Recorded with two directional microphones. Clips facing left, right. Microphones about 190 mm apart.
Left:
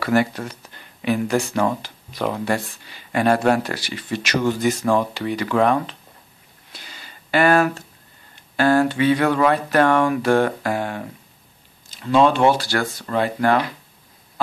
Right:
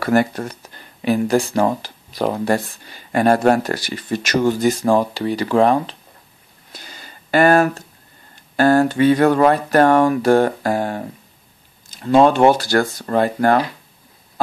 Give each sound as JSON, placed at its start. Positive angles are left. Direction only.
{"t": 0.0, "sound": "speech", "side_deg": -45}
{"t": 6.7, "sound": "a sound", "side_deg": -45}
{"t": 8.5, "sound": "speech", "side_deg": -45}